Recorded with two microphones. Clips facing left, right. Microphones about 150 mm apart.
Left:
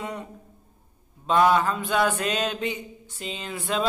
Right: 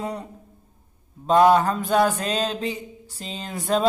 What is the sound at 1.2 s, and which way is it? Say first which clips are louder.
Mantra: right 4 dB; 40° right (ahead or behind).